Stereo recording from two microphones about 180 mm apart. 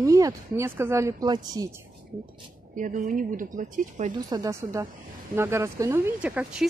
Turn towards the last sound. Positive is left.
turn(degrees=-5)  # may be behind; listen again after turning